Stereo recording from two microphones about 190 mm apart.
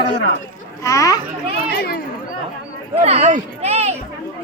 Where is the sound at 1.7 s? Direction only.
55° left (ahead or behind).